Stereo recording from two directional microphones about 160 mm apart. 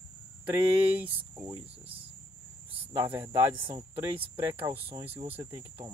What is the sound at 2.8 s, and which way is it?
Speech, 15° right (ahead or behind).